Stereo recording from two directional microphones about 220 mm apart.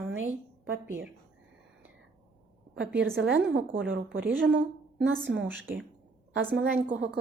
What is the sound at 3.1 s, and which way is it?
Speech, 50° right (ahead or behind).